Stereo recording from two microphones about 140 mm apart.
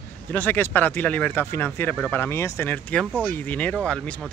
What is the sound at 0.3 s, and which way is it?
Speech, 15° left (ahead or behind).